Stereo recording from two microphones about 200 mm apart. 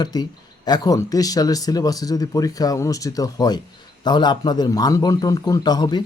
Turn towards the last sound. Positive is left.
turn(degrees=20)  # may be behind; listen again after turning